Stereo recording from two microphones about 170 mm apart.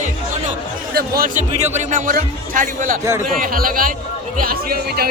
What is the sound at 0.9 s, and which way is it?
A man's voice, 60° right (ahead or behind).